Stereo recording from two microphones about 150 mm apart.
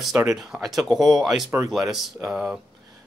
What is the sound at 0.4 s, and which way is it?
Speech, centre (ahead or behind).